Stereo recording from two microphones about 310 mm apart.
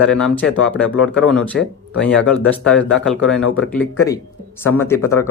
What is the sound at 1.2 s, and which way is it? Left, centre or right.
Speech, centre.